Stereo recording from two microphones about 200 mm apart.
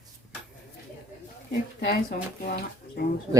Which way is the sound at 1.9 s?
45° left (ahead or behind).